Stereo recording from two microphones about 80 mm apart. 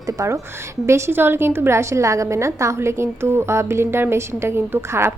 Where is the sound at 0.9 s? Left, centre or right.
Right.